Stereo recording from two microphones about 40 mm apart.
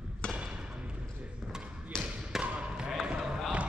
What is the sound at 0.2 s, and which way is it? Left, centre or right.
Thump, left.